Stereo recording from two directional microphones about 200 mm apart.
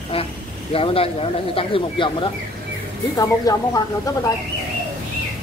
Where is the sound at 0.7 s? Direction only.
30° left (ahead or behind).